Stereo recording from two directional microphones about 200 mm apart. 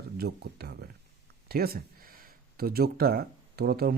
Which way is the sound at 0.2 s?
55° right (ahead or behind).